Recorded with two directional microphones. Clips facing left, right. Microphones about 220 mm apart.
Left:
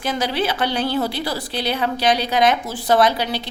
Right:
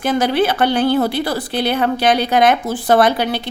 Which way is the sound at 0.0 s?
55° right (ahead or behind).